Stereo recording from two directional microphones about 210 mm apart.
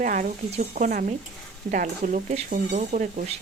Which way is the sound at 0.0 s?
40° right (ahead or behind).